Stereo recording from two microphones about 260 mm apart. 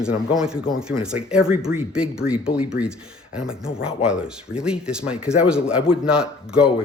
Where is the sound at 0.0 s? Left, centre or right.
Centre.